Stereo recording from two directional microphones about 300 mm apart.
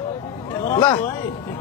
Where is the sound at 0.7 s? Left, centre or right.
Centre.